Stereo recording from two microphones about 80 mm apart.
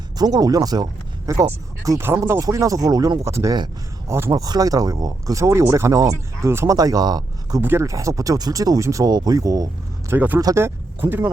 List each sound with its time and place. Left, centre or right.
0.2 s speech: right
1.3 s speech: right
2.0 s speech: right
2.4 s speech: right
4.3 s speech: right
6.5 s speech: right
6.7 s speech: right
7.6 s speech: right
7.9 s speech: right
10.2 s speech: right